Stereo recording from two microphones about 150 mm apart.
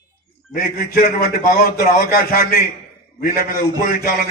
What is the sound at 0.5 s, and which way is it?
A man's voice, 80° left.